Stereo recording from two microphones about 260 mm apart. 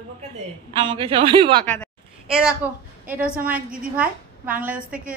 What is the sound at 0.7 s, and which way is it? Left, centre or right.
Speech, centre.